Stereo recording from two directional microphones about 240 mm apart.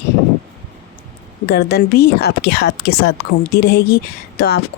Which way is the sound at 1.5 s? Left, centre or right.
Left.